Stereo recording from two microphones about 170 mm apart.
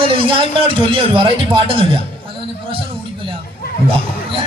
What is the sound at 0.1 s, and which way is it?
A man's voice, 30° right (ahead or behind).